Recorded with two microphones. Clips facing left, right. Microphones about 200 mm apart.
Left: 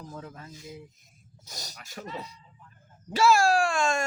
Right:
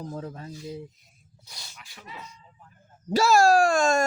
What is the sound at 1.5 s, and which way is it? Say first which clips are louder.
Speech: left 5 dB; 40° left (ahead or behind).